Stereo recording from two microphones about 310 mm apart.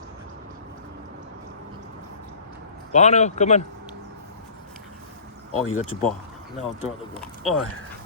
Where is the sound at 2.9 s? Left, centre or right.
Left.